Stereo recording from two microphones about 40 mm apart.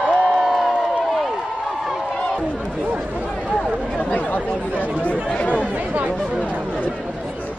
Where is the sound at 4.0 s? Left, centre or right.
Left.